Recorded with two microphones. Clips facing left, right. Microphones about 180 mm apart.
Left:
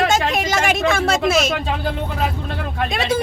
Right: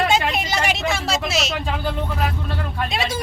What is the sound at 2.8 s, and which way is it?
Speech, 55° left (ahead or behind).